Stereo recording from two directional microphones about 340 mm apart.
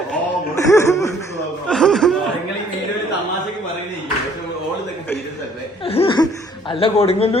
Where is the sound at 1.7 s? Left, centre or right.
Centre.